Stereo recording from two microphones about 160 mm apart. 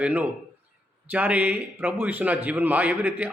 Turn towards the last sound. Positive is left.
turn(degrees=-10)  # may be behind; listen again after turning